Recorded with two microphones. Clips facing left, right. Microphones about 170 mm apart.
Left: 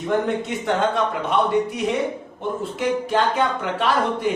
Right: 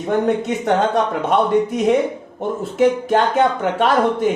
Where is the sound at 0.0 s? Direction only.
50° right (ahead or behind).